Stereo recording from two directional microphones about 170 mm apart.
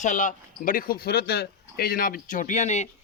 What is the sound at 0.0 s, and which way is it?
Speech, 45° left (ahead or behind).